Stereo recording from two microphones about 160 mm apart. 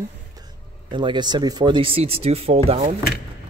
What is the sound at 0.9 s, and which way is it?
Speech, 30° right (ahead or behind).